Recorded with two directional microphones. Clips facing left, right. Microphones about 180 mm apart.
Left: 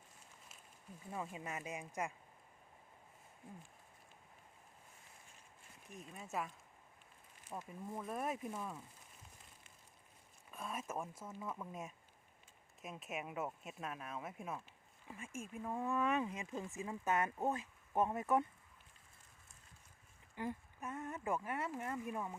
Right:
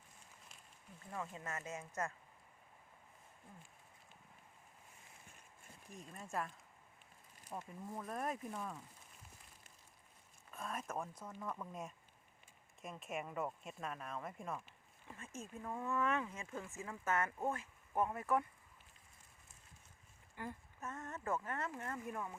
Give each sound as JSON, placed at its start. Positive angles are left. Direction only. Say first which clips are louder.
{"t": 1.1, "sound": "speech", "louder": "left 1 dB", "side_deg": 15}
{"t": 5.9, "sound": "speech", "louder": "even", "side_deg": 5}
{"t": 7.5, "sound": "speech", "louder": "left 1 dB", "side_deg": 5}
{"t": 10.5, "sound": "speech", "louder": "even", "side_deg": 5}
{"t": 20.3, "sound": "speech", "louder": "left 5 dB", "side_deg": 20}